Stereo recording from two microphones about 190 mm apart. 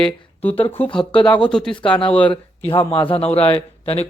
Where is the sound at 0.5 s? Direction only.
30° left (ahead or behind).